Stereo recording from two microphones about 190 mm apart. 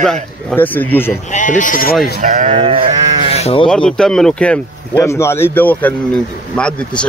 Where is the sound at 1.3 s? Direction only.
40° left (ahead or behind).